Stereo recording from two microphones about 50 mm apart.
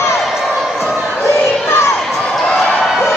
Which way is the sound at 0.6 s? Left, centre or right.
Centre.